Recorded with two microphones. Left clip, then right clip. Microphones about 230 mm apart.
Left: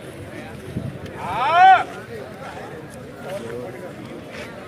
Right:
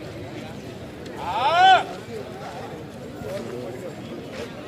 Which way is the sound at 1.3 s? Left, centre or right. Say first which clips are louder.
Left 3 dB; right.